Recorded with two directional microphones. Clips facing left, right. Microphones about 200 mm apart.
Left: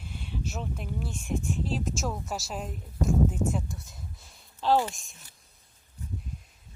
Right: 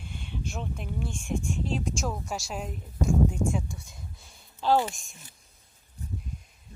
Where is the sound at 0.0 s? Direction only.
Centre (ahead or behind).